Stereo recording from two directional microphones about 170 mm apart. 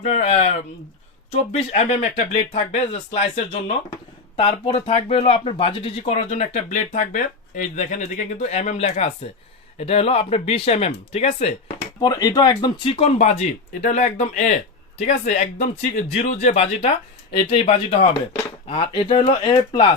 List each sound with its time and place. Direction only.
0.0 s speech: 40° left (ahead or behind)
11.9 s speech: 25° left (ahead or behind)